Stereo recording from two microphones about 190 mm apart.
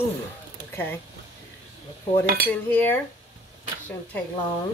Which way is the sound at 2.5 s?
10° left (ahead or behind).